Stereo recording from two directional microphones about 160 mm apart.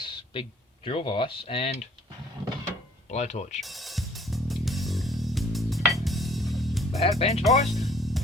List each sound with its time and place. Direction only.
0.0 s a sound: 30° left (ahead or behind)
0.9 s speech: 35° left (ahead or behind)
3.1 s speech: 45° left (ahead or behind)
3.6 s music: centre (ahead or behind)
7.2 s speech: 40° left (ahead or behind)
7.7 s music: centre (ahead or behind)